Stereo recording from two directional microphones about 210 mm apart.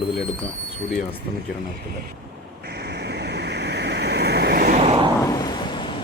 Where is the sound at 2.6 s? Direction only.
50° right (ahead or behind); by 5.1 s 30° right (ahead or behind).